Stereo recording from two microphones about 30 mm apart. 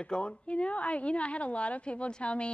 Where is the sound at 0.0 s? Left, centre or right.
Left.